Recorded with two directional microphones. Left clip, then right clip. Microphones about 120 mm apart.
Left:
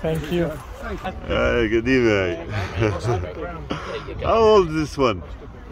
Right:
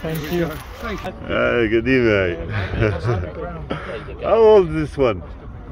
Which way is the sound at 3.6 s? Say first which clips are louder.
Right 1 dB; 50° left (ahead or behind).